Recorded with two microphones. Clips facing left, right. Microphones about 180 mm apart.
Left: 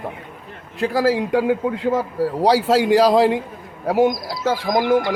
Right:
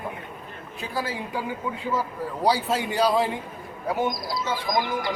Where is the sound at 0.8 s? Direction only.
90° left.